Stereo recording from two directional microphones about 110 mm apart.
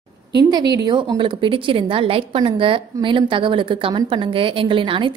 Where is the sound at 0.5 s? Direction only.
40° right (ahead or behind).